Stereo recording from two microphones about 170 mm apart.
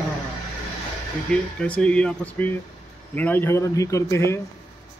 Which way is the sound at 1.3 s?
5° left (ahead or behind).